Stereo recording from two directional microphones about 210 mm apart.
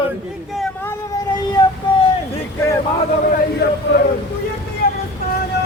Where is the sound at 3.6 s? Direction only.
50° left (ahead or behind).